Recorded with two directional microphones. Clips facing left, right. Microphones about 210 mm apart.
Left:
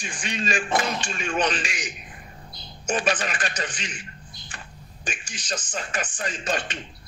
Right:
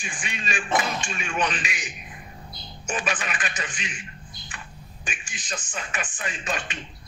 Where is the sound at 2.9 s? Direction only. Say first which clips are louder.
Left 4 dB; 40° left (ahead or behind).